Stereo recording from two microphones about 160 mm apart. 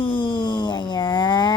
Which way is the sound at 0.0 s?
30° left (ahead or behind).